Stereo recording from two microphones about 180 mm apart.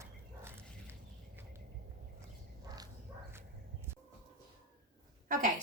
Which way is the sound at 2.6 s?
20° right (ahead or behind).